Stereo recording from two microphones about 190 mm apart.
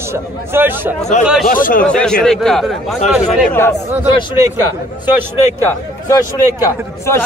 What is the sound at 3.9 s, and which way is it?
Speech, 10° right (ahead or behind).